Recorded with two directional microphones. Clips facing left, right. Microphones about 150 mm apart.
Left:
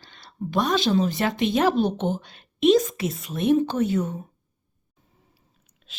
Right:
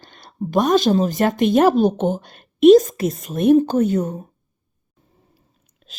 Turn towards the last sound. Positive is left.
turn(degrees=-45)  # may be behind; listen again after turning